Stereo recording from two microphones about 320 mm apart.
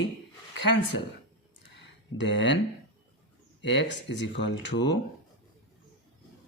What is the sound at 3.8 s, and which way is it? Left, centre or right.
Speech, left.